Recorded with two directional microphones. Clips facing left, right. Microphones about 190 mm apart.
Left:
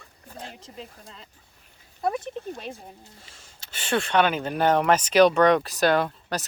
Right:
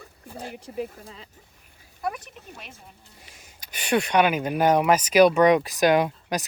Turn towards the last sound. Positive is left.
turn(degrees=-15)  # may be behind; listen again after turning